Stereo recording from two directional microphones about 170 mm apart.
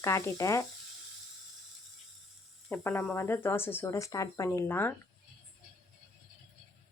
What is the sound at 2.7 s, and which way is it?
Speech, 15° left (ahead or behind).